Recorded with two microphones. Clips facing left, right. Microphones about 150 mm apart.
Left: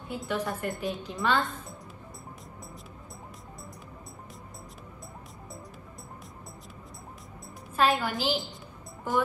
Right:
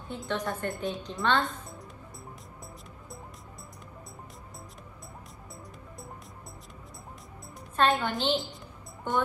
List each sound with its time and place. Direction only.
0.1 s a woman's voice: 5° left (ahead or behind)
7.7 s a woman's voice: 5° left (ahead or behind)